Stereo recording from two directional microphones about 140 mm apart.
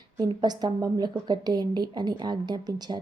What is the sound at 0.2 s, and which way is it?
Speech, 30° right (ahead or behind).